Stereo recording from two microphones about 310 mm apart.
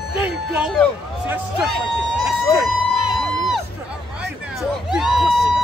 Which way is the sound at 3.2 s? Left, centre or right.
Centre.